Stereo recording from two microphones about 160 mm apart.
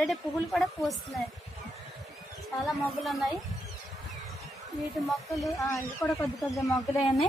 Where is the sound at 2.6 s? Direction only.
Centre (ahead or behind).